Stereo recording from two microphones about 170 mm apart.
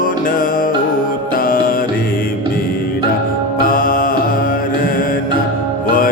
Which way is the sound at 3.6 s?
55° left (ahead or behind).